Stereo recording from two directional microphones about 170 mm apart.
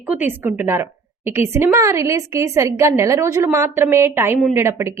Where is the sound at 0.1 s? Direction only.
10° right (ahead or behind).